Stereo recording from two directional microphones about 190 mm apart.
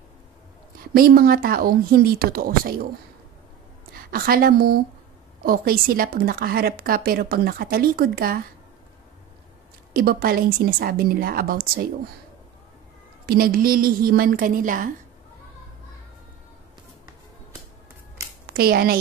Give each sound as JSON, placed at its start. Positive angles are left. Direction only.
{"t": 0.9, "sound": "a woman's voice", "side_deg": -50}
{"t": 3.9, "sound": "a woman's voice", "side_deg": -50}
{"t": 9.9, "sound": "a woman's voice", "side_deg": -50}
{"t": 13.3, "sound": "a woman's voice", "side_deg": -50}
{"t": 18.5, "sound": "a woman's voice", "side_deg": -55}